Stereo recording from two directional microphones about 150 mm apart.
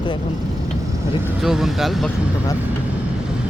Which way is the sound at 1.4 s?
Centre (ahead or behind).